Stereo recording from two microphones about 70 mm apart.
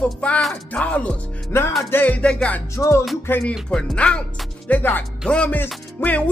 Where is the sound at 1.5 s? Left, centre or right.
Left.